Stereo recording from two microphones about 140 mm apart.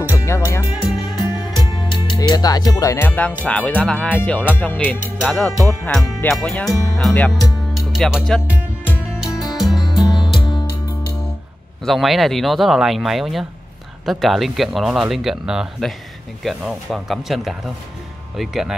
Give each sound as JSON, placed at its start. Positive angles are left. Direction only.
{"t": 0.1, "sound": "music", "side_deg": 20}
{"t": 0.7, "sound": "music", "side_deg": 0}
{"t": 1.2, "sound": "speech", "side_deg": 30}
{"t": 9.1, "sound": "music", "side_deg": 0}
{"t": 10.0, "sound": "music", "side_deg": 35}
{"t": 11.8, "sound": "speech", "side_deg": 0}